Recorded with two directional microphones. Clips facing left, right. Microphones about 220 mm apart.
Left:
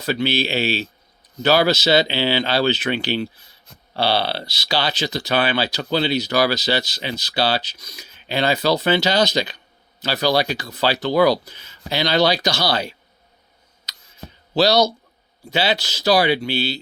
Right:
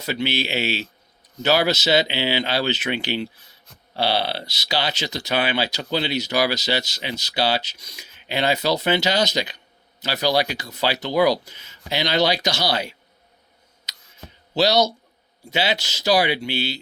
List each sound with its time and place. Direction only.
0.0 s speech: 20° right (ahead or behind)
14.5 s speech: 20° right (ahead or behind)